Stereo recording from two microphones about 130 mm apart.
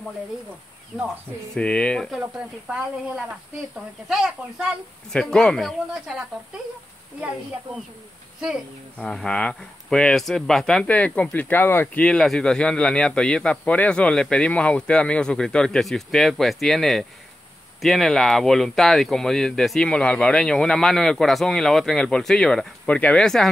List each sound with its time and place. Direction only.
1.5 s speech: 10° left (ahead or behind)
3.3 s speech: 5° right (ahead or behind)
8.4 s speech: 5° right (ahead or behind)
8.9 s speech: 5° left (ahead or behind)